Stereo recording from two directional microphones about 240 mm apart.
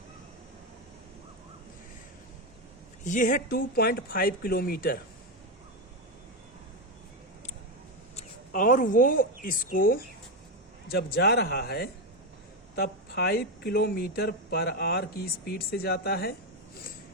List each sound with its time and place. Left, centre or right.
3.0 s speech: left
8.1 s speech: left